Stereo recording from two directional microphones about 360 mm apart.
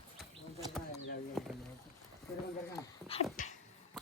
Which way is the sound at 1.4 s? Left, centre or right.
Centre.